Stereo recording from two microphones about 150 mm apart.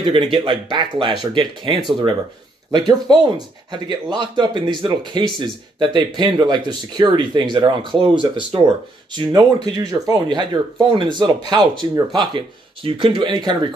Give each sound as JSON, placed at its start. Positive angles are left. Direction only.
{"t": 0.0, "sound": "speech", "side_deg": -35}